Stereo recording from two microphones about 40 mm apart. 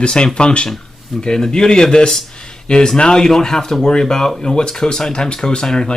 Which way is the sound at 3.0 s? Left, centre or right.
Centre.